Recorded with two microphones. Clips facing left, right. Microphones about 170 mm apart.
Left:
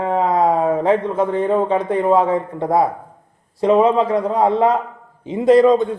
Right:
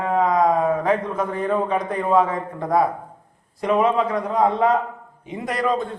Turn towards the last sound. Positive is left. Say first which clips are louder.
# left 11 dB
turn(degrees=20)  # may be behind; listen again after turning